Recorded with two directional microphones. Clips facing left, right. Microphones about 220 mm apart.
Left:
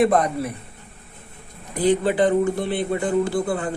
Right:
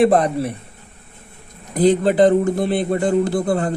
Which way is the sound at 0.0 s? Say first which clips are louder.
Right 4 dB; 30° right (ahead or behind).